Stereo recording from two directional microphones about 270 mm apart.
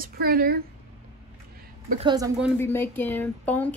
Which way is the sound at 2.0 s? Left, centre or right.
Centre.